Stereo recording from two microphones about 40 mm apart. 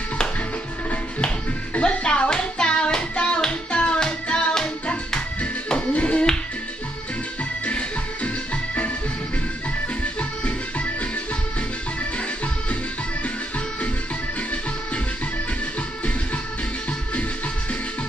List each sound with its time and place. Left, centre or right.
1.8 s music: left
5.9 s music: left
7.6 s music: left